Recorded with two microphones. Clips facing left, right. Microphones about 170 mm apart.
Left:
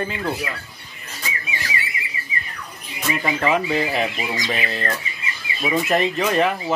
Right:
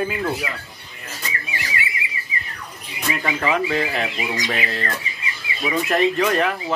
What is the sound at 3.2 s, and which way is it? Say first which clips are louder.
Speech: left 1 dB; 5° left (ahead or behind).